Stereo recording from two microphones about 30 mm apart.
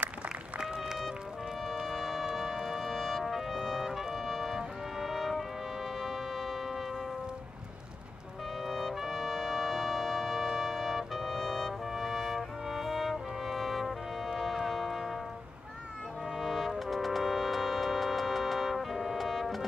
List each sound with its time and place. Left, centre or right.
0.6 s music: centre
1.9 s music: centre
3.3 s music: centre
4.1 s trumpet: centre
5.0 s music: centre
8.6 s music: centre
10.6 s trumpet: centre
12.0 s music: centre
12.4 s music: centre
14.4 s a sound: centre
14.9 s music: centre
16.3 s music: centre